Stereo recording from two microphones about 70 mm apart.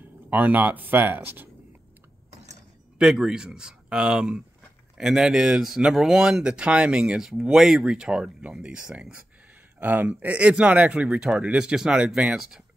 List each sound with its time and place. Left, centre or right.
0.0 s speech: right
3.0 s speech: centre